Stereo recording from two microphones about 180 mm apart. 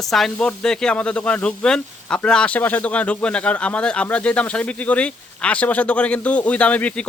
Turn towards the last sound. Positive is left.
turn(degrees=5)  # may be behind; listen again after turning